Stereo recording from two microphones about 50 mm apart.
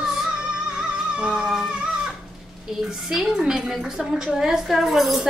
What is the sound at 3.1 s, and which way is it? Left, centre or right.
A woman's voice, centre.